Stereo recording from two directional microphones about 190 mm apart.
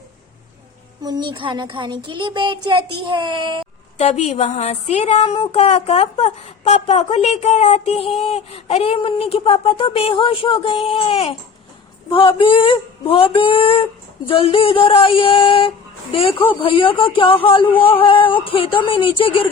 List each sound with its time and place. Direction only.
1.0 s a child's voice: 20° right (ahead or behind)
3.9 s speech: 35° left (ahead or behind)
12.4 s speech: 25° left (ahead or behind)